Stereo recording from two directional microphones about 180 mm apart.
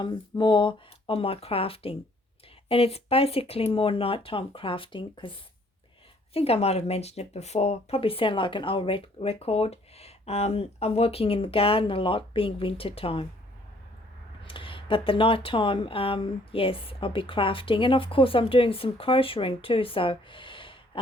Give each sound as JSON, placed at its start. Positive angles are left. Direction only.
{"t": 0.0, "sound": "speech", "side_deg": 25}
{"t": 6.3, "sound": "speech", "side_deg": 35}
{"t": 14.4, "sound": "speech", "side_deg": 30}